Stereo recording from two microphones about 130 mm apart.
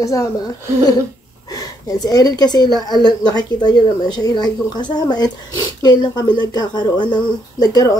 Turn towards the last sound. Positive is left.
turn(degrees=30)  # may be behind; listen again after turning